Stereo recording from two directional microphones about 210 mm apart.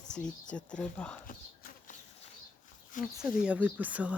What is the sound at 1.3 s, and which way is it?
Bee, 40° left (ahead or behind).